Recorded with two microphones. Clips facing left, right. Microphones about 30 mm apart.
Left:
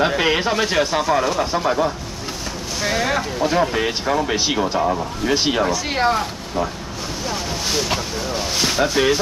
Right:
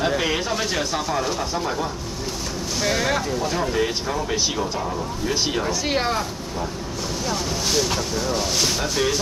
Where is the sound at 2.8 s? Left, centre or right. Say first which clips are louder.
Left 2 dB; centre.